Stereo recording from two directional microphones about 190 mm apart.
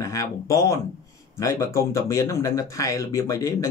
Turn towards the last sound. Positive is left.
turn(degrees=15)  # may be behind; listen again after turning